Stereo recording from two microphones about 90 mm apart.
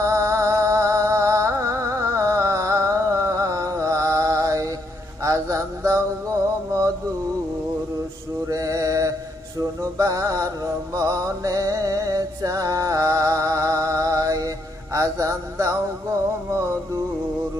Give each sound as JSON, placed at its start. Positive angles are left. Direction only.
{"t": 0.0, "sound": "music", "side_deg": -35}
{"t": 5.2, "sound": "mantra", "side_deg": -35}
{"t": 8.4, "sound": "a sound", "side_deg": -40}
{"t": 9.8, "sound": "mantra", "side_deg": -40}
{"t": 14.9, "sound": "music", "side_deg": -35}